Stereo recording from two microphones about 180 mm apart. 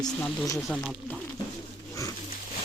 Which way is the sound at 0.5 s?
Centre (ahead or behind).